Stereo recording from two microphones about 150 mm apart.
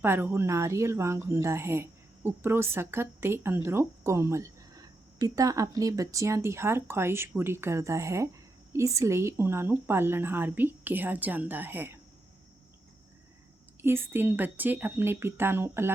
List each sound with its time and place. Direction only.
0.0 s speech: 15° right (ahead or behind)
13.8 s speech: 15° right (ahead or behind)